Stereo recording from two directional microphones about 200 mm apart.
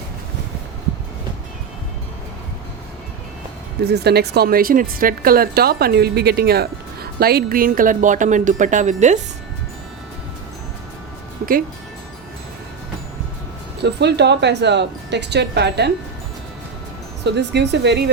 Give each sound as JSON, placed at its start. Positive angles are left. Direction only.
{"t": 3.8, "sound": "speech", "side_deg": -55}
{"t": 13.8, "sound": "speech", "side_deg": -60}
{"t": 17.2, "sound": "speech", "side_deg": -60}